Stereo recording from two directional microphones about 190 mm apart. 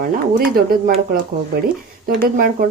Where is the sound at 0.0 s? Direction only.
50° right (ahead or behind).